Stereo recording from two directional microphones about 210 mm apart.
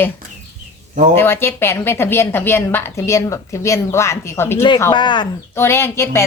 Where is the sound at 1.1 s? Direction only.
10° left (ahead or behind).